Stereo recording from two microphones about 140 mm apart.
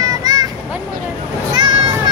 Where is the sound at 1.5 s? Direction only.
30° right (ahead or behind).